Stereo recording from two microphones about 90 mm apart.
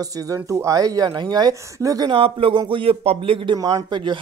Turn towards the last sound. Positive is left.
turn(degrees=-65)  # may be behind; listen again after turning